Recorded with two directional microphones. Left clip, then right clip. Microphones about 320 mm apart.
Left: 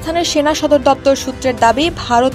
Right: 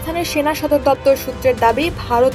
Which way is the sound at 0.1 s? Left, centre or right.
Left.